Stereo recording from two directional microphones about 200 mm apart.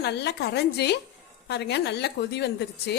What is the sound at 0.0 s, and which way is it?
A woman's voice, 55° left (ahead or behind).